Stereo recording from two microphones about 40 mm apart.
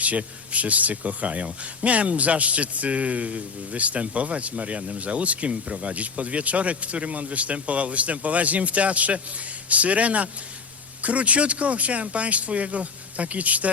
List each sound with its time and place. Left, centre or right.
0.0 s speech: right